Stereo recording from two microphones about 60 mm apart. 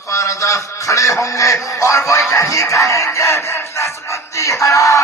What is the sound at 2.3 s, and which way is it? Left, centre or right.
Music, left.